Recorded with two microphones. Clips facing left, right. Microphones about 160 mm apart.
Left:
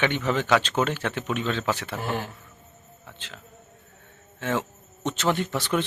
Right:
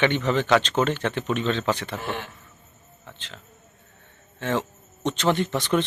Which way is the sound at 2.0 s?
40° left (ahead or behind).